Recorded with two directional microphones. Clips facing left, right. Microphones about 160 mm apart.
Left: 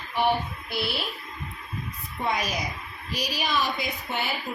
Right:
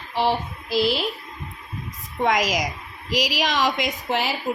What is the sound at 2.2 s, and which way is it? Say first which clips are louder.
A woman's voice: right 7 dB; 90° right.